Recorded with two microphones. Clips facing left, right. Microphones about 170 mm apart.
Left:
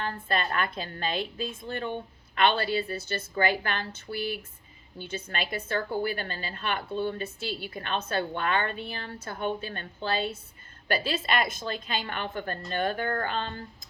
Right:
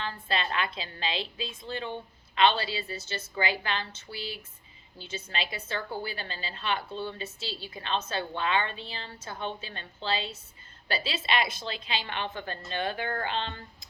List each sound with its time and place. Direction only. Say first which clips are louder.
0.0 s a woman's voice: left 2 dB; 50° left (ahead or behind)